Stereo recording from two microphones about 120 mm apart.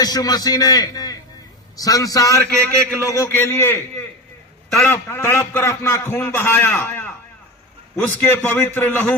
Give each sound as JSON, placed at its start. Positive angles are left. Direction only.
{"t": 0.0, "sound": "a man's voice", "side_deg": 35}